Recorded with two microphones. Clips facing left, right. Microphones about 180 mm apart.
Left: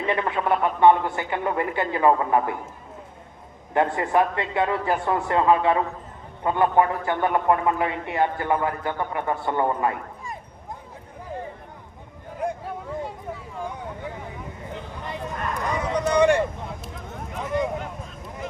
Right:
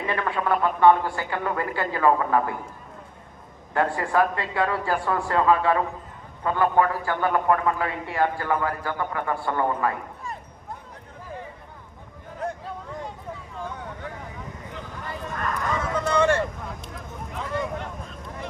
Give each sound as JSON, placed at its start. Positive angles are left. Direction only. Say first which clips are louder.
{"t": 0.1, "sound": "a man's voice", "louder": "left 2 dB", "side_deg": 20}
{"t": 3.8, "sound": "a man's voice", "louder": "left 1 dB", "side_deg": 20}
{"t": 12.4, "sound": "hubbub", "louder": "left 3 dB", "side_deg": 15}
{"t": 13.6, "sound": "vehicle", "louder": "left 2 dB", "side_deg": 15}
{"t": 15.0, "sound": "a sound", "louder": "even", "side_deg": 20}